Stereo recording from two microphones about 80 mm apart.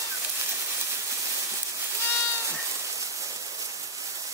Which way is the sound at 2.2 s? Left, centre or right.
Right.